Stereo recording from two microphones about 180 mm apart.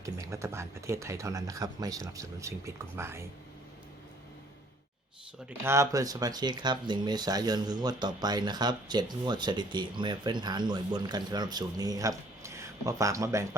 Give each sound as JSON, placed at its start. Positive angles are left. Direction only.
{"t": 0.0, "sound": "speech", "side_deg": -15}
{"t": 5.5, "sound": "speech", "side_deg": -15}